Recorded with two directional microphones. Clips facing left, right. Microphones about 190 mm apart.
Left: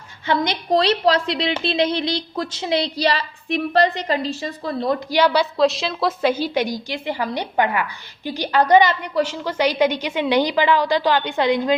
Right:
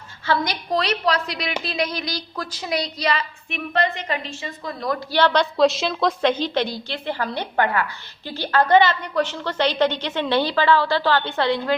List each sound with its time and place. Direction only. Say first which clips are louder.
0.3 s a woman's voice: left 3 dB; 25° left (ahead or behind)
5.1 s a woman's voice: even; 10° left (ahead or behind)